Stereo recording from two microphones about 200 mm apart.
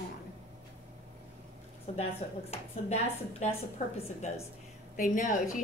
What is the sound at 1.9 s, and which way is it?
A woman's voice, 30° left (ahead or behind).